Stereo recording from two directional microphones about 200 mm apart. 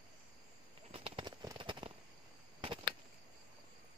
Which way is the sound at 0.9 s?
25° right (ahead or behind).